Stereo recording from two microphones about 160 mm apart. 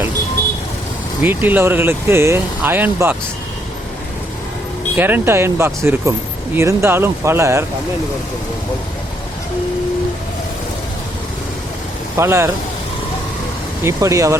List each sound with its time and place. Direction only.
1.2 s speech: 10° right (ahead or behind)
4.9 s speech: 10° right (ahead or behind)
12.1 s speech: 15° right (ahead or behind)
13.8 s speech: 20° right (ahead or behind)